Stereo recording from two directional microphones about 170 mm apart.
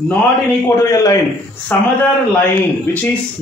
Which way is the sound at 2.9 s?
10° left (ahead or behind).